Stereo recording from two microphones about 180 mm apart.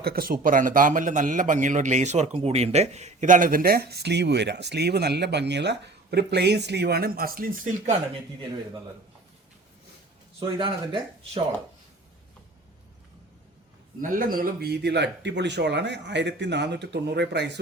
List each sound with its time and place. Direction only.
0.0 s a man's voice: 55° right (ahead or behind)
10.4 s speech: 25° right (ahead or behind)
14.0 s a man's voice: 50° right (ahead or behind); by 17.6 s 70° right (ahead or behind)